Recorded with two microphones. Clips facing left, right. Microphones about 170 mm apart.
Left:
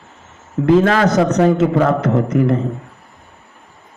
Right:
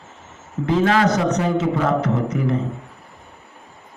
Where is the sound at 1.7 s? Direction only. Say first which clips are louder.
Left 5 dB; 60° left (ahead or behind).